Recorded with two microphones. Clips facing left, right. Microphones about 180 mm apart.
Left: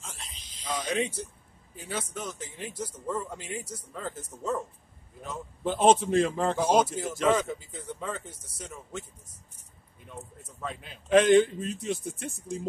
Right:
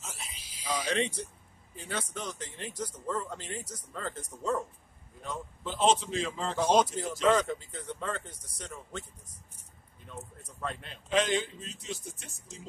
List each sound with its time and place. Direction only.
0.0 s a sound: 5° right (ahead or behind)
0.8 s speech: 5° left (ahead or behind)
5.6 s speech: 55° left (ahead or behind)
6.5 s speech: 10° left (ahead or behind)
10.4 s speech: centre (ahead or behind)
11.1 s speech: 55° left (ahead or behind)